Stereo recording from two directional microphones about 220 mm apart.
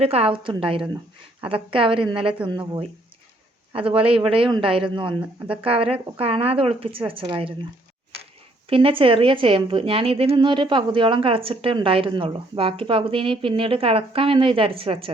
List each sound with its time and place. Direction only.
0.0 s a woman's voice: 25° right (ahead or behind)
8.7 s a woman's voice: 25° right (ahead or behind)